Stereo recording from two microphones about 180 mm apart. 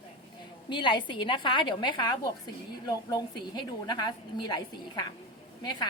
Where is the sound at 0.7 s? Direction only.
25° left (ahead or behind).